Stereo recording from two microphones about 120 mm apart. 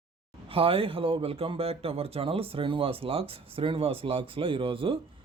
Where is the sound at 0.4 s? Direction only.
50° right (ahead or behind).